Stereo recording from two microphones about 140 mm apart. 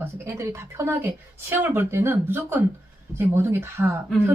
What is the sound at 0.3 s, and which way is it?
A woman's voice, 20° right (ahead or behind).